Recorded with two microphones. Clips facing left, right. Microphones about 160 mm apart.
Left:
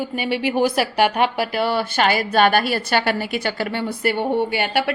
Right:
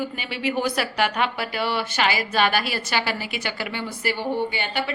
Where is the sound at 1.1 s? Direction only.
45° left (ahead or behind).